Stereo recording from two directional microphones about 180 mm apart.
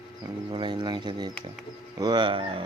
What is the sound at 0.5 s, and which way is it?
Speech, 25° right (ahead or behind).